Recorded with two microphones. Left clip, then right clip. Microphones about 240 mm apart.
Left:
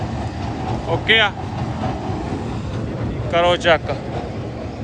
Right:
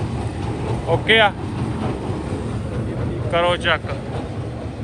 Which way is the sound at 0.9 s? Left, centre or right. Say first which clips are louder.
Right 1 dB; centre.